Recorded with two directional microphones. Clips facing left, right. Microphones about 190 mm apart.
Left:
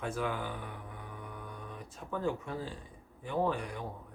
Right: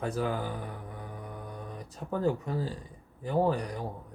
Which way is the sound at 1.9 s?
40° right (ahead or behind).